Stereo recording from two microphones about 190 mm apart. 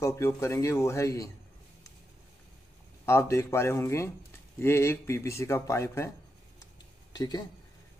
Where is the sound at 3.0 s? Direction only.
15° left (ahead or behind).